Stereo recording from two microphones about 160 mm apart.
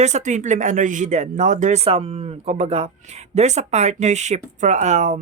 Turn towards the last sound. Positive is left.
turn(degrees=-45)  # may be behind; listen again after turning